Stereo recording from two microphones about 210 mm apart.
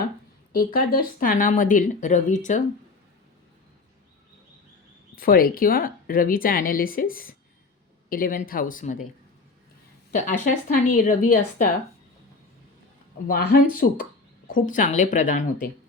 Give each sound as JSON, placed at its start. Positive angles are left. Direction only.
{"t": 0.5, "sound": "speech", "side_deg": 45}
{"t": 5.1, "sound": "a woman's voice", "side_deg": 45}
{"t": 10.1, "sound": "speech", "side_deg": 40}
{"t": 13.2, "sound": "a woman's voice", "side_deg": 45}